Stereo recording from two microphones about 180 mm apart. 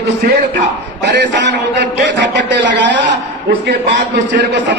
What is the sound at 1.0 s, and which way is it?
A man's voice, 75° right (ahead or behind).